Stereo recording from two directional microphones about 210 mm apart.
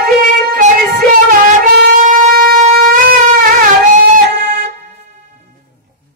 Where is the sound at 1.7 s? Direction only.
40° right (ahead or behind).